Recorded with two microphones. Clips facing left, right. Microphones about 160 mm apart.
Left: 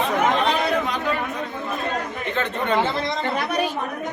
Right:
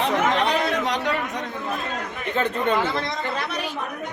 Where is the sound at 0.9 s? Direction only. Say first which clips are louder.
Right 1 dB; 75° right (ahead or behind).